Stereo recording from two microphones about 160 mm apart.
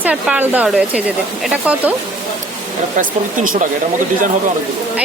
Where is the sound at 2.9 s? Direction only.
55° right (ahead or behind).